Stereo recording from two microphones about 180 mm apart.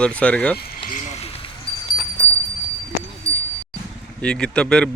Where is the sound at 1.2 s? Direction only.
35° left (ahead or behind).